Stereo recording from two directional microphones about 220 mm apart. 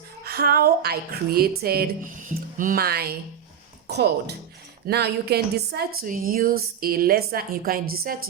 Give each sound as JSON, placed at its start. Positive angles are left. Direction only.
{"t": 0.3, "sound": "a woman's voice", "side_deg": -45}